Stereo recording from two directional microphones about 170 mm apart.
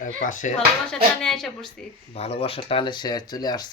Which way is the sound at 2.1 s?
35° left (ahead or behind).